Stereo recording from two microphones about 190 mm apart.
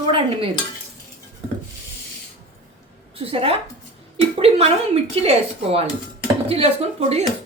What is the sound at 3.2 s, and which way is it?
A woman's voice, 30° right (ahead or behind).